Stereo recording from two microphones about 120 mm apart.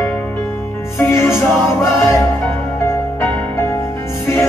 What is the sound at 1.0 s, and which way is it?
Music, 20° left (ahead or behind).